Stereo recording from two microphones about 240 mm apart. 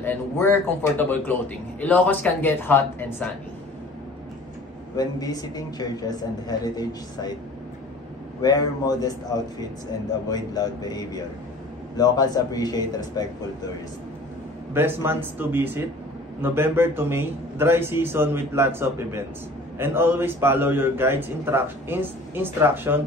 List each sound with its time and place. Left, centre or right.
0.0 s a man's voice: centre
4.9 s a man's voice: centre
8.4 s a man's voice: centre
10.2 s a man's voice: centre
14.7 s a man's voice: centre